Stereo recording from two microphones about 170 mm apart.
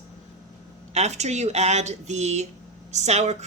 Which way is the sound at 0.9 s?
40° right (ahead or behind).